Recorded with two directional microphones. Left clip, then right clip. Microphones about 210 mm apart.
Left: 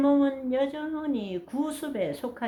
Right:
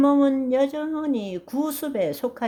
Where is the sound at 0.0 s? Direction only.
45° right (ahead or behind).